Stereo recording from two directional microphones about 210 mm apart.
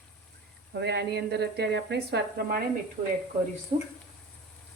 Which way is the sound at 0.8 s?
55° right (ahead or behind).